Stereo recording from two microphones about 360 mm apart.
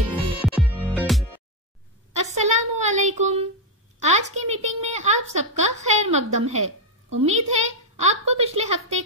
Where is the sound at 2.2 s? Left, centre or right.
Centre.